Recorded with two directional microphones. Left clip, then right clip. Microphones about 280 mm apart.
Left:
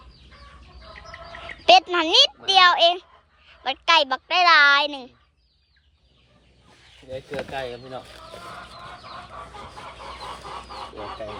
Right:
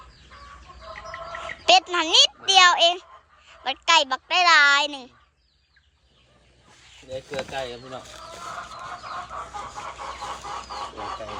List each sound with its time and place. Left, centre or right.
0.9 s bird: centre
3.6 s speech: centre
7.0 s speech: centre
8.7 s chicken: right